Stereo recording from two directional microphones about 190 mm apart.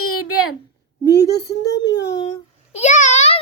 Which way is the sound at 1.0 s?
60° left (ahead or behind).